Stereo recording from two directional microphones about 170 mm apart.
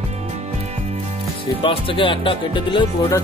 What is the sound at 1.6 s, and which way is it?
Speech, 30° left (ahead or behind).